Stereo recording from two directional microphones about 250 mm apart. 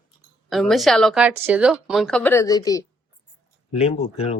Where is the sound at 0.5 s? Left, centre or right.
Centre.